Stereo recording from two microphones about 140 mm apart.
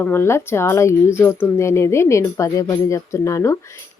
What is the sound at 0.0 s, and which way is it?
Speech, 15° left (ahead or behind).